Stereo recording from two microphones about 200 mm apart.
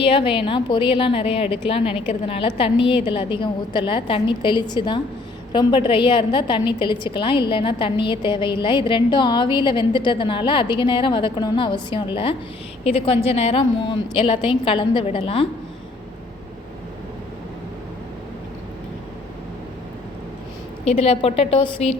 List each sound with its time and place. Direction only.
0.0 s a woman's voice: 25° left (ahead or behind)
20.8 s a woman's voice: 30° left (ahead or behind)